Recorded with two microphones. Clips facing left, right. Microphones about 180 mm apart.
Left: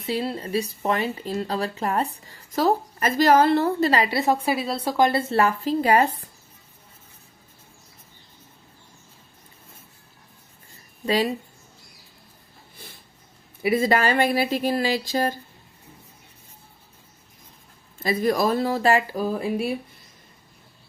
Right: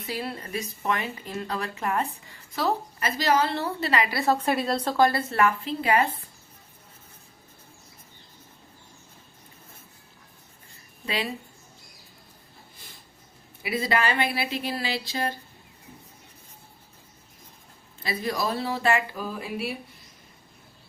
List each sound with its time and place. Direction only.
0.0 s speech: 25° left (ahead or behind)
4.4 s a woman's voice: 5° left (ahead or behind); by 6.1 s 40° left (ahead or behind)
11.0 s a woman's voice: 40° left (ahead or behind)
13.6 s speech: 45° left (ahead or behind)
18.0 s speech: 45° left (ahead or behind)